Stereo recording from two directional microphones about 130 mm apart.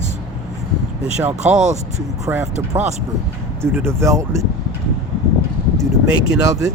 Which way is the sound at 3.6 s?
20° right (ahead or behind).